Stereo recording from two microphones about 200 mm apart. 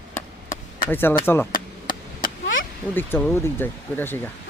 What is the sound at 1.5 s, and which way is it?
Chop, 45° left (ahead or behind).